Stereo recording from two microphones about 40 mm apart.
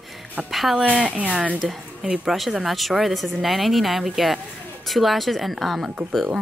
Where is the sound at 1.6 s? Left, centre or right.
Centre.